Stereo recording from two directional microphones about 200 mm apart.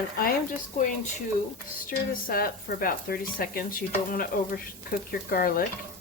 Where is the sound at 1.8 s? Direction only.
45° left (ahead or behind).